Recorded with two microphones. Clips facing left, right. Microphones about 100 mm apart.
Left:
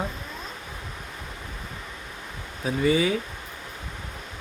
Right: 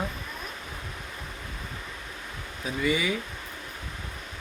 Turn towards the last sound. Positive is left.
turn(degrees=30)  # may be behind; listen again after turning